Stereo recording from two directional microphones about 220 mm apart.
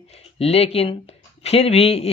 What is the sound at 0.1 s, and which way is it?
Speech, 30° left (ahead or behind).